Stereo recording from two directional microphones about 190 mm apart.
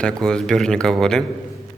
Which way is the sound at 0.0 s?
5° left (ahead or behind).